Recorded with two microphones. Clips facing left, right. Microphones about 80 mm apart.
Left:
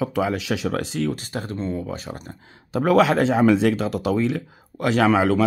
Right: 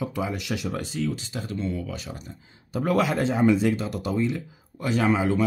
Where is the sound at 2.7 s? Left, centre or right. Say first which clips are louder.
Left 6 dB; left.